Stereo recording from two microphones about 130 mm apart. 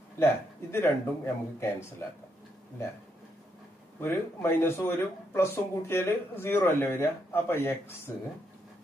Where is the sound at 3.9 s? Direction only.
20° left (ahead or behind).